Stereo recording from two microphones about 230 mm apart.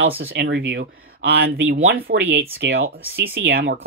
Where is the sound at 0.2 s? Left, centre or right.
Right.